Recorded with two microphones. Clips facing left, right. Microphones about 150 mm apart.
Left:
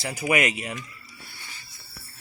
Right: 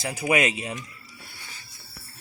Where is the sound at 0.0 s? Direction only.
15° right (ahead or behind).